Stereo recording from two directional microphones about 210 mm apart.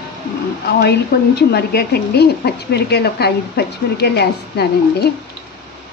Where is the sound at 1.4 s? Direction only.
50° left (ahead or behind).